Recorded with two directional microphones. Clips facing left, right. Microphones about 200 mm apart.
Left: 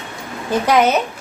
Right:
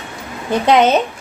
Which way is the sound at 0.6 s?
25° right (ahead or behind).